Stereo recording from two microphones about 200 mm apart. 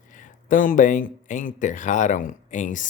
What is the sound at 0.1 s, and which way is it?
Speech, 40° left (ahead or behind).